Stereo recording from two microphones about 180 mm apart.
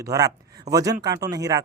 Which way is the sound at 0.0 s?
20° right (ahead or behind).